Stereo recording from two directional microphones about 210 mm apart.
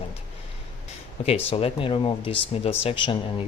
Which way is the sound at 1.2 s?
30° left (ahead or behind).